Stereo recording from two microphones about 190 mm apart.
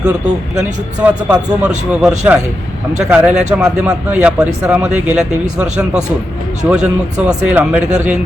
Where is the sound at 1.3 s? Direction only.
5° right (ahead or behind).